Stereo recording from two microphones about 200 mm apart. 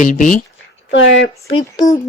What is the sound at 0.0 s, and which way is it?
Speech, 40° left (ahead or behind).